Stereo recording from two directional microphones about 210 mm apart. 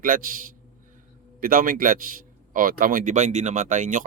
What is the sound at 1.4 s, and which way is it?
A man's voice, 40° right (ahead or behind).